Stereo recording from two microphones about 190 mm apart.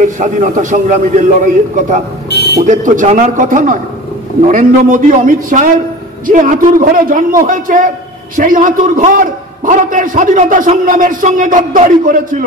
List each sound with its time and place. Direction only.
0.0 s a man's voice: 40° right (ahead or behind)
2.2 s buzzer: 60° left (ahead or behind)
2.5 s a man's voice: 40° right (ahead or behind)